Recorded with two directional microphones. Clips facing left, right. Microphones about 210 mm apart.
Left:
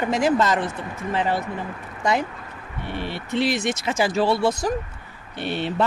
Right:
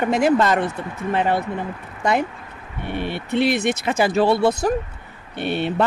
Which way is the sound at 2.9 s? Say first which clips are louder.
Right 4 dB; 55° right (ahead or behind).